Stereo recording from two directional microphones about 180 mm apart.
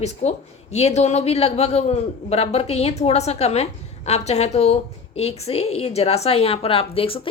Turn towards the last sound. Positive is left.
turn(degrees=30)  # may be behind; listen again after turning